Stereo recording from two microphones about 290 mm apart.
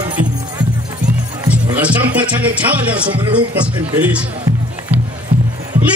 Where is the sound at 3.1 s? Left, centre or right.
Centre.